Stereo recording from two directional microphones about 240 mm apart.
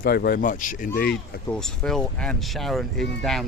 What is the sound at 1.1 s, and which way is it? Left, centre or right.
Speech, centre.